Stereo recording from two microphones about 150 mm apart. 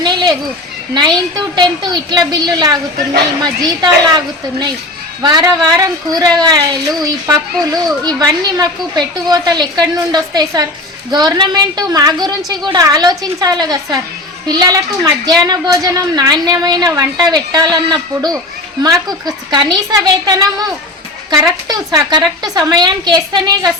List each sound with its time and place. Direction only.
0.0 s a sound: 30° right (ahead or behind)
0.9 s a woman's voice: 30° right (ahead or behind)
5.2 s a woman's voice: 30° right (ahead or behind)
18.8 s a woman's voice: 25° right (ahead or behind)